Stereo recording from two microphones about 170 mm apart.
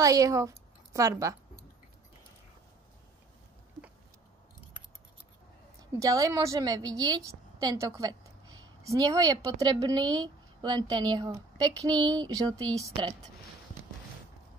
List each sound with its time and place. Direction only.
0.0 s a woman's voice: 20° right (ahead or behind)
5.9 s a woman's voice: 20° right (ahead or behind)